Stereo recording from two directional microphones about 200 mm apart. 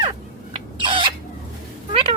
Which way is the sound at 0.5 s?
25° right (ahead or behind).